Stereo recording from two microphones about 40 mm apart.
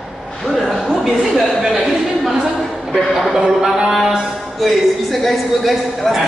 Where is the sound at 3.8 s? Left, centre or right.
Centre.